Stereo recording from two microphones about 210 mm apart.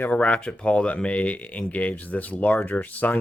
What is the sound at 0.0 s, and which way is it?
Speech, 5° left (ahead or behind).